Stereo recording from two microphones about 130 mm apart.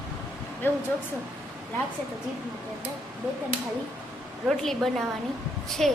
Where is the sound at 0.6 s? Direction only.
15° left (ahead or behind).